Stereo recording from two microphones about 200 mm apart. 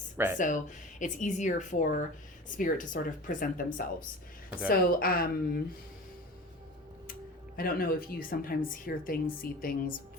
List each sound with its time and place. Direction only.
0.3 s speech: 40° left (ahead or behind)
7.1 s speech: 50° left (ahead or behind)